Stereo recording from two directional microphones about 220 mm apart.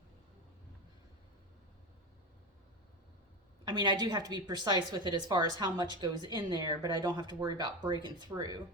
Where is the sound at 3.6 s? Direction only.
20° right (ahead or behind).